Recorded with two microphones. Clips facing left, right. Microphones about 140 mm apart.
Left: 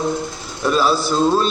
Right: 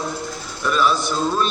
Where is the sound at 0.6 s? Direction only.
30° left (ahead or behind).